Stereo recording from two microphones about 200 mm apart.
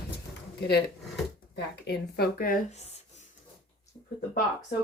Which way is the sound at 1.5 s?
55° left (ahead or behind).